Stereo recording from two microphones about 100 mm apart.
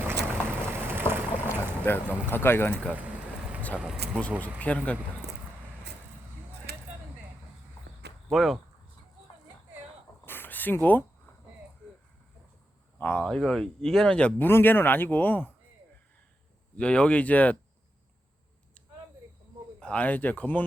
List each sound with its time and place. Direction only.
0.0 s boat: 20° right (ahead or behind)
1.8 s speech: 20° left (ahead or behind)
4.4 s speech: 15° left (ahead or behind)
8.3 s speech: centre (ahead or behind)
10.2 s a sound: 20° left (ahead or behind)
13.0 s speech: 15° left (ahead or behind)
13.2 s speech: 5° left (ahead or behind)
16.7 s speech: 10° left (ahead or behind)
19.8 s speech: 15° left (ahead or behind)